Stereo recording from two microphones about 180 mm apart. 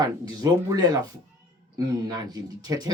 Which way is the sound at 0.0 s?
20° right (ahead or behind).